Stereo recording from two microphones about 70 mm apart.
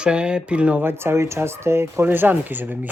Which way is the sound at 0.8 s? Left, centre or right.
Right.